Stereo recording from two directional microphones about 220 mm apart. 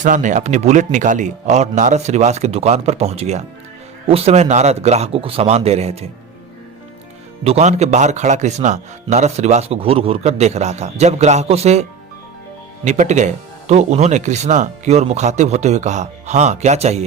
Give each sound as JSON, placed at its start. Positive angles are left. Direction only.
{"t": 0.0, "sound": "speech", "side_deg": -35}
{"t": 7.4, "sound": "speech", "side_deg": -30}